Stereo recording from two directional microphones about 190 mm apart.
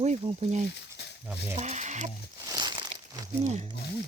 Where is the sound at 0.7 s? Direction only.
65° left (ahead or behind).